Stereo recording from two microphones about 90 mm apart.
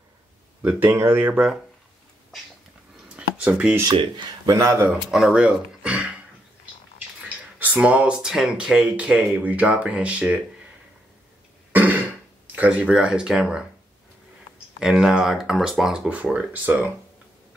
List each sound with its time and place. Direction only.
0.6 s speech: 20° right (ahead or behind)
3.1 s a sound: 15° right (ahead or behind)
4.5 s speech: 35° right (ahead or behind)
5.1 s speech: 10° right (ahead or behind)
7.5 s speech: 20° right (ahead or behind)
11.7 s throat clearing: 20° right (ahead or behind)
12.5 s speech: 15° right (ahead or behind)
14.8 s speech: 5° right (ahead or behind)
16.1 s speech: 15° right (ahead or behind)